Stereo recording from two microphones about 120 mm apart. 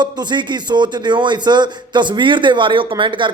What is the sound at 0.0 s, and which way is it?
Speech, 40° right (ahead or behind).